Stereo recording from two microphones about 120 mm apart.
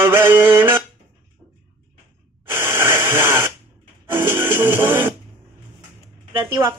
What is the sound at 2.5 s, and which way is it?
Spray, 20° right (ahead or behind).